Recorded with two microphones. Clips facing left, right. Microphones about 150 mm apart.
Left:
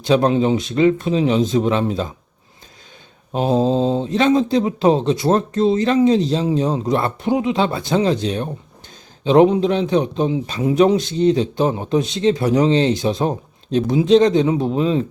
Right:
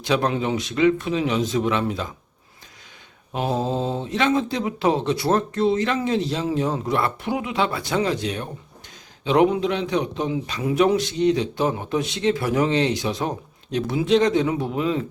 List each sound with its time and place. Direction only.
0.1 s a man's voice: 30° left (ahead or behind)
3.3 s a man's voice: 25° left (ahead or behind)